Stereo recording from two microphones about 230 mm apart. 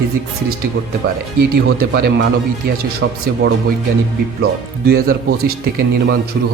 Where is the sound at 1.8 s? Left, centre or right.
Right.